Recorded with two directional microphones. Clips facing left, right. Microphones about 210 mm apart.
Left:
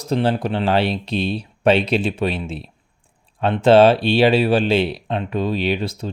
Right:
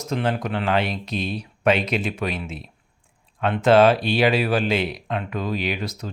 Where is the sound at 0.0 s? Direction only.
30° left (ahead or behind).